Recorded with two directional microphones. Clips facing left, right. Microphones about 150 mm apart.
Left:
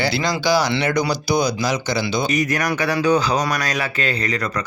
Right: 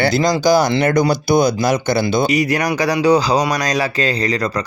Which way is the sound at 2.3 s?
30° right (ahead or behind).